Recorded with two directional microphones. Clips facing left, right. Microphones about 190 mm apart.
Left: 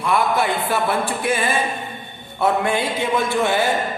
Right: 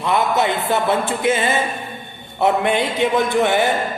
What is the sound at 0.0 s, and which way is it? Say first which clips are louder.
A woman's voice: right 1 dB; 20° right (ahead or behind).